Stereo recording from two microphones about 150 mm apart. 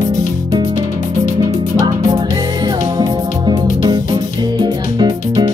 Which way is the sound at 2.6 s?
30° right (ahead or behind).